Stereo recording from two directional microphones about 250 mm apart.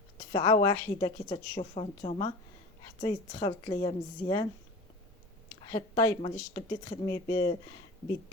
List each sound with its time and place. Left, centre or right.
0.3 s a woman's voice: centre
5.7 s a woman's voice: centre